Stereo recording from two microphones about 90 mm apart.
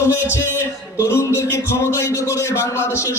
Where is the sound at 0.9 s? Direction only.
30° left (ahead or behind).